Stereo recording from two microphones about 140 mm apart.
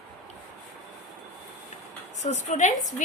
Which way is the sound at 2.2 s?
55° left (ahead or behind).